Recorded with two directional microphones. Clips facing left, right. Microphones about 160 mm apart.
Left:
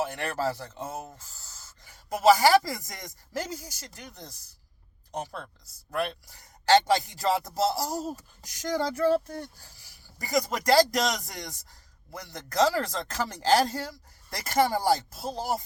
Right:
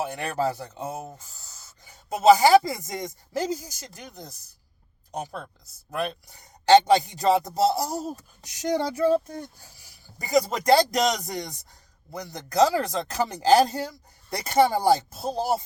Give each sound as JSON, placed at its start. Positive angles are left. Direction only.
{"t": 0.0, "sound": "speech", "side_deg": -20}
{"t": 5.2, "sound": "speech", "side_deg": -15}